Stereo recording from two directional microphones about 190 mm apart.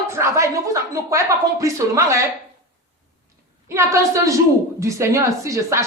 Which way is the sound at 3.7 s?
15° right (ahead or behind).